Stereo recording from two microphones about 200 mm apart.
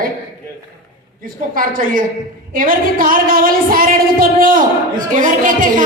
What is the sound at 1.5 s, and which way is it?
A woman's voice, 45° right (ahead or behind).